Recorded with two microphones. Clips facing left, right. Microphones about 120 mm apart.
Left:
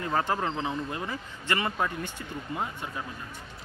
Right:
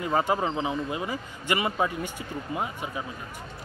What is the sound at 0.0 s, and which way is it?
A man's voice, 10° right (ahead or behind).